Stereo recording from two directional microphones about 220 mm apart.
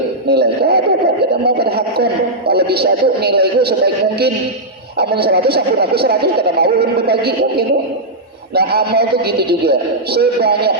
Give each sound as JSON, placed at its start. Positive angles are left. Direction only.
{"t": 0.3, "sound": "speech", "side_deg": -45}
{"t": 1.5, "sound": "a sound", "side_deg": -45}
{"t": 2.5, "sound": "speech", "side_deg": -45}